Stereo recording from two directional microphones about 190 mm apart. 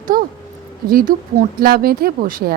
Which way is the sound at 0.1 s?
50° right (ahead or behind).